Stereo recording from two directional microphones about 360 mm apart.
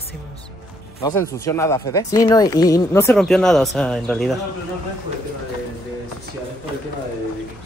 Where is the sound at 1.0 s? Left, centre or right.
Centre.